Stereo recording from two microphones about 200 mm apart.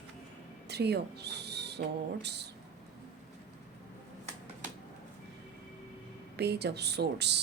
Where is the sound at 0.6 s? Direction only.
55° right (ahead or behind).